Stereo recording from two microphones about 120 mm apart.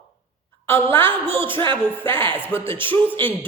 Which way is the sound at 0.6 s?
20° left (ahead or behind).